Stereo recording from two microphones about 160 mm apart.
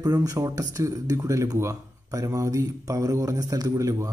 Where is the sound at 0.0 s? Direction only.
25° right (ahead or behind).